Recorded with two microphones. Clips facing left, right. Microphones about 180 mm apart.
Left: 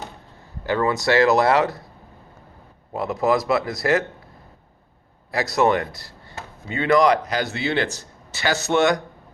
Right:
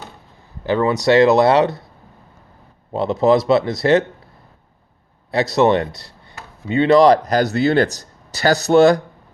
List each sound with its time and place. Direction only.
0.6 s speech: 20° right (ahead or behind)
2.9 s speech: 25° right (ahead or behind)
5.3 s speech: 25° right (ahead or behind)